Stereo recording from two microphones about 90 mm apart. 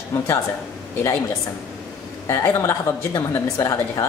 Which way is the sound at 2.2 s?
35° left (ahead or behind).